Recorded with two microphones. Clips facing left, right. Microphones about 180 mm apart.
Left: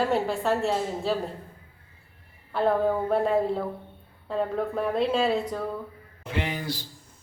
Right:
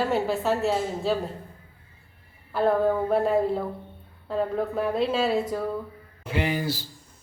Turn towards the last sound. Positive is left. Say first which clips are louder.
# right 4 dB
turn(degrees=-5)  # may be behind; listen again after turning